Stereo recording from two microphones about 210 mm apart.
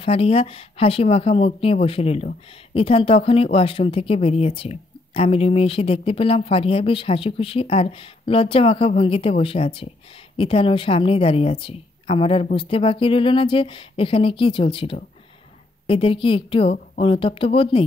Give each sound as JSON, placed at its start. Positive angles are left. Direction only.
{"t": 0.0, "sound": "speech", "side_deg": 25}